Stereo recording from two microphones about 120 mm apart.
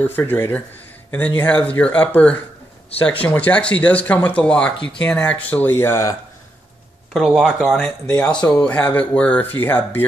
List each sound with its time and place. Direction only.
0.0 s speech: 15° left (ahead or behind)
7.2 s speech: 5° right (ahead or behind)
7.7 s speech: 10° left (ahead or behind)